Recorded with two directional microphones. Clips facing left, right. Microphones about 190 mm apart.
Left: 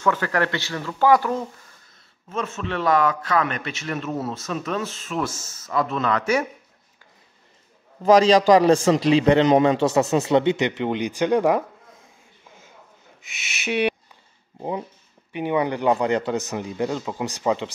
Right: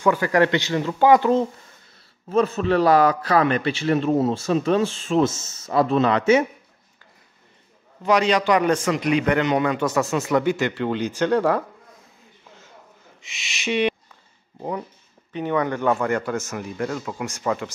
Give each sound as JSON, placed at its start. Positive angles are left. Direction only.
{"t": 0.0, "sound": "speech", "side_deg": -15}
{"t": 2.2, "sound": "a man's voice", "side_deg": -35}
{"t": 8.0, "sound": "a man's voice", "side_deg": 35}
{"t": 13.2, "sound": "owl", "side_deg": 0}
{"t": 14.6, "sound": "a man's voice", "side_deg": 20}